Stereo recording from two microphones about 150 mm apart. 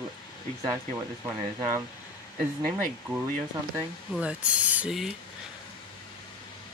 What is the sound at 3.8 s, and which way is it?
Speech, 10° right (ahead or behind).